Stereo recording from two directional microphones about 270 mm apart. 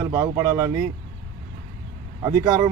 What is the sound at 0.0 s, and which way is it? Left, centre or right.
Speech, centre.